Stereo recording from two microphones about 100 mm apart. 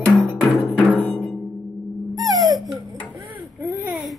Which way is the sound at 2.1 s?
35° right (ahead or behind).